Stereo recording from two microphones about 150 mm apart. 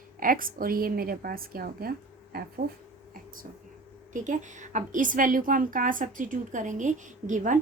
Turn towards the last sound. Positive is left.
turn(degrees=-60)  # may be behind; listen again after turning